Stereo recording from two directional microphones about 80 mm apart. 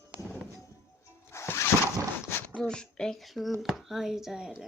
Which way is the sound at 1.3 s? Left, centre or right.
Left.